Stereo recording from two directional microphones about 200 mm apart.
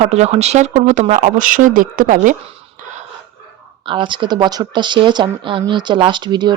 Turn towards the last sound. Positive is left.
turn(degrees=-20)  # may be behind; listen again after turning